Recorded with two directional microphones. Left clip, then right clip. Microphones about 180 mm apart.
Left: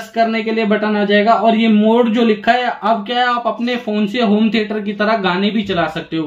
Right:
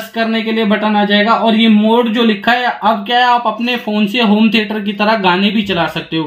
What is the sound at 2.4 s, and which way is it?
Speech, 50° right (ahead or behind).